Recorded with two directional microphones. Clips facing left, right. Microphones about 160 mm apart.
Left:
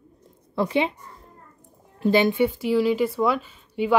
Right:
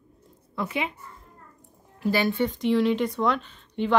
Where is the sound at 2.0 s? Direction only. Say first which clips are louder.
Left 5 dB; 20° left (ahead or behind).